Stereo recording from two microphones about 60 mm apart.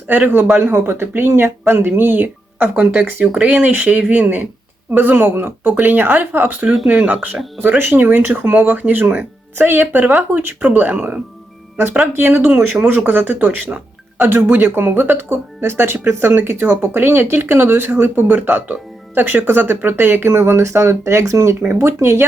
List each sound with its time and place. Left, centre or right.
0.1 s speech: right
0.5 s speech: right
9.6 s speech: right
10.6 s speech: right
12.1 s speech: right
14.3 s speech: right